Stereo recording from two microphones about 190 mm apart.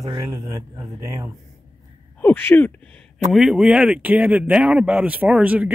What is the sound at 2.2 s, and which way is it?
Speech, 10° left (ahead or behind).